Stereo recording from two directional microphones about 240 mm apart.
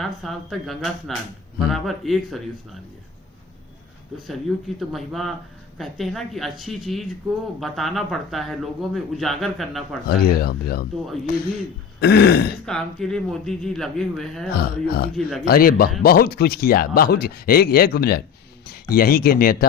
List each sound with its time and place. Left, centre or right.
0.0 s speech: centre
4.8 s speech: centre
10.1 s speech: left
11.9 s speech: left
12.6 s speech: centre
14.5 s speech: left